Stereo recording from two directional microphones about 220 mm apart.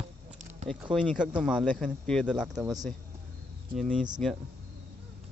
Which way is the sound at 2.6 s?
15° right (ahead or behind).